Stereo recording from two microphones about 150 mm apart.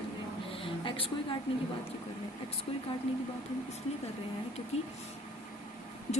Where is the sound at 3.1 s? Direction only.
40° left (ahead or behind).